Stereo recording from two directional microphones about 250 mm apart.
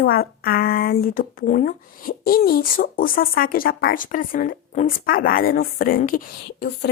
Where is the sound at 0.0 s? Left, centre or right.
Left.